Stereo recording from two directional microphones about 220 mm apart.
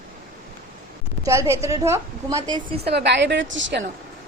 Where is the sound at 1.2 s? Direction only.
15° right (ahead or behind).